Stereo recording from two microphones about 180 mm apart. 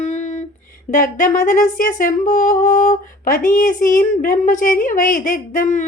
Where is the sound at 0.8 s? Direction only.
45° left (ahead or behind).